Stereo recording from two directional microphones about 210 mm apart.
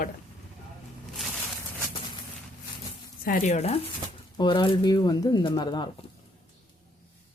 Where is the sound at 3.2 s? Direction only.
40° left (ahead or behind); by 5.9 s 20° left (ahead or behind).